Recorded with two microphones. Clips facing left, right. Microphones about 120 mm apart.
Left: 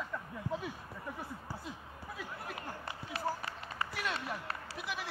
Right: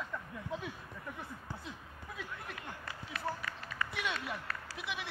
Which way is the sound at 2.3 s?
30° left (ahead or behind).